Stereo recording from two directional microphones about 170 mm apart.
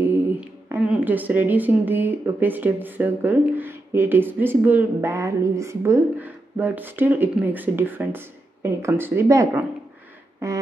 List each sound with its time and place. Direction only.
0.0 s speech: 10° right (ahead or behind)